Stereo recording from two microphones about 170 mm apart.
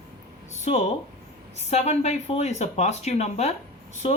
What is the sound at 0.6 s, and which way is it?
A woman's voice, 40° left (ahead or behind).